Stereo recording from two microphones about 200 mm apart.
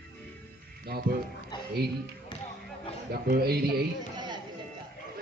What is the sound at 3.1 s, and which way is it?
Speech, 50° right (ahead or behind).